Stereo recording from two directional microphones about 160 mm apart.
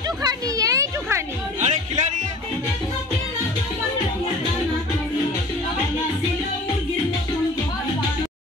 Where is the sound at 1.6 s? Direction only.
45° right (ahead or behind).